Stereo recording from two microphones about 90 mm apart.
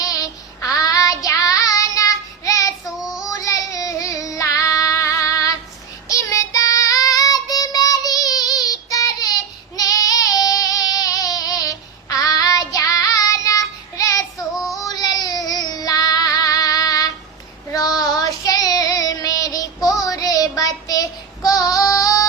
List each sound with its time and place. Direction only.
0.0 s child singing: 40° left (ahead or behind)
2.8 s child singing: 5° right (ahead or behind)
3.2 s child singing: 40° left (ahead or behind)
14.3 s child singing: centre (ahead or behind)
14.8 s child singing: 45° left (ahead or behind)